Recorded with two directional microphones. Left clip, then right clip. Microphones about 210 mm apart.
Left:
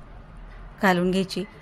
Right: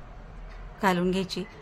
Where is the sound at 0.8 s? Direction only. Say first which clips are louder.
Left 4 dB; 15° left (ahead or behind).